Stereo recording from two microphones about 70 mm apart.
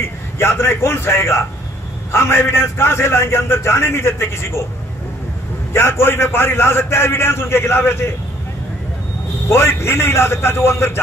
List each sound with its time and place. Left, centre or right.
0.4 s a man's voice: left
5.7 s a man's voice: left
9.5 s a man's voice: left